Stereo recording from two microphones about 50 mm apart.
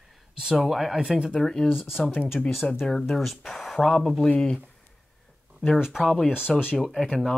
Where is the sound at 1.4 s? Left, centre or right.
Centre.